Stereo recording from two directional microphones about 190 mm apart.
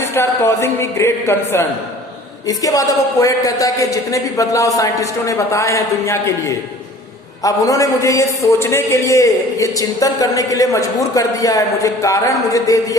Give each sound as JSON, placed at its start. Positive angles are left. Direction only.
{"t": 0.0, "sound": "a man's voice", "side_deg": 15}
{"t": 7.4, "sound": "a man's voice", "side_deg": 15}